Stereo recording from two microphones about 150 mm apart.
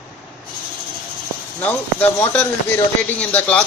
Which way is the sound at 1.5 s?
10° left (ahead or behind).